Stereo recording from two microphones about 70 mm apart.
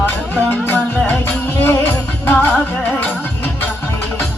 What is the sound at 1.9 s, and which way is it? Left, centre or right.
Music, left.